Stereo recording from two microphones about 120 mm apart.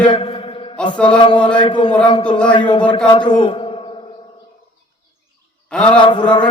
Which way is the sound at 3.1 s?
40° left (ahead or behind).